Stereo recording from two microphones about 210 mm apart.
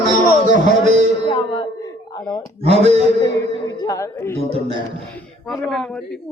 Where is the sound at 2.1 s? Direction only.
20° left (ahead or behind).